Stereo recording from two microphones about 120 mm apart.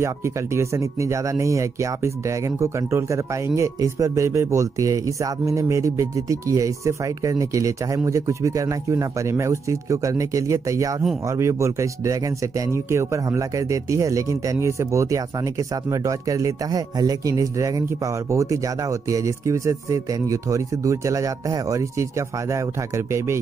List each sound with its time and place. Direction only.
0.0 s speech: 25° right (ahead or behind)